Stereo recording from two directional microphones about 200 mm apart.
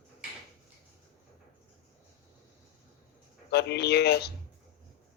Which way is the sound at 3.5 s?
55° left (ahead or behind).